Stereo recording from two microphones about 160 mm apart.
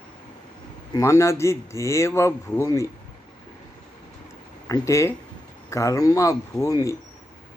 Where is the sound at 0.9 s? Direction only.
20° left (ahead or behind).